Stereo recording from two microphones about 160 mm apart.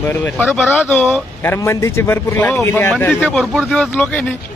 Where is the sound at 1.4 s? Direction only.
15° left (ahead or behind).